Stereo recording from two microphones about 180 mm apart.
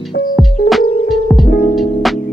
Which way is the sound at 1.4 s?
55° left (ahead or behind).